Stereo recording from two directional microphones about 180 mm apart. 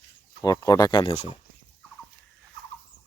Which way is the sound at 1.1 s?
40° left (ahead or behind).